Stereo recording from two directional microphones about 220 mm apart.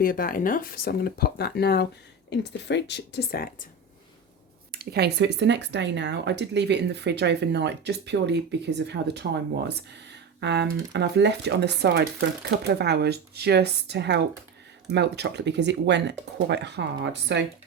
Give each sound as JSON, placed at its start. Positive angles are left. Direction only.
{"t": 0.0, "sound": "speech", "side_deg": 40}
{"t": 4.7, "sound": "speech", "side_deg": -45}